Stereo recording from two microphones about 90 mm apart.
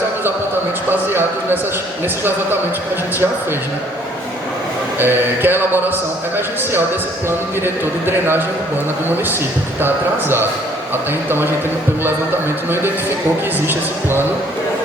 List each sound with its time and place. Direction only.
0.9 s speech: 25° right (ahead or behind)
4.9 s speech: 25° right (ahead or behind)
7.3 s speech: 25° right (ahead or behind)
9.8 s speech: 25° right (ahead or behind)
13.7 s speech: 25° right (ahead or behind)